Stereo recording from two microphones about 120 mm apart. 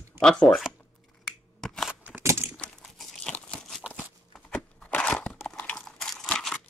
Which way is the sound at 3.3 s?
5° left (ahead or behind).